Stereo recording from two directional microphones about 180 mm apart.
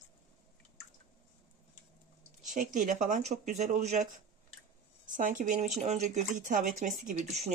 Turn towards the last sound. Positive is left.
turn(degrees=-45)  # may be behind; listen again after turning